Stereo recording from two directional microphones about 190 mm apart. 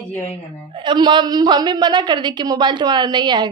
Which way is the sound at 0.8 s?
25° right (ahead or behind).